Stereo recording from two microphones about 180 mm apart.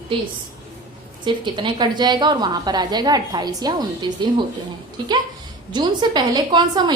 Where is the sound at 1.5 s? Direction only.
25° right (ahead or behind).